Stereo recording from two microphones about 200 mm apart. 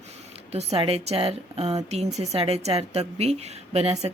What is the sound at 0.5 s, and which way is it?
A woman's voice, 30° right (ahead or behind).